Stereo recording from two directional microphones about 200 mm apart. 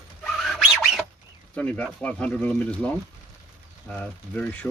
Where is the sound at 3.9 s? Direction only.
5° left (ahead or behind).